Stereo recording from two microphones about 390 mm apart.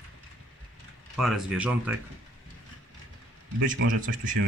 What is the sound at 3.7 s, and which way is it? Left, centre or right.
Speech, right.